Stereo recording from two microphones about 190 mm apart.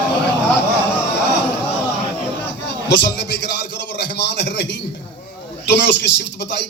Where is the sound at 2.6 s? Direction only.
65° left (ahead or behind).